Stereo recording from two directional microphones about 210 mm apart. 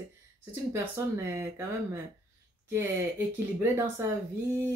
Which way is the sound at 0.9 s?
10° right (ahead or behind).